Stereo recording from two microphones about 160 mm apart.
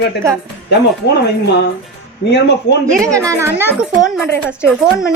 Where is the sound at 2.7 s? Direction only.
90° left.